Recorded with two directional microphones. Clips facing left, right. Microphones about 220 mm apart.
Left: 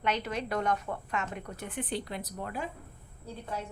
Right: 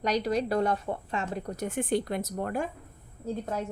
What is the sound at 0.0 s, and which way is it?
Speech, 35° right (ahead or behind).